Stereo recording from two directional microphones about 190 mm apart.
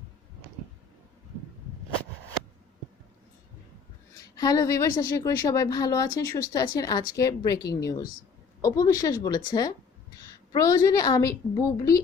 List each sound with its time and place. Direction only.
4.4 s a woman's voice: 20° left (ahead or behind)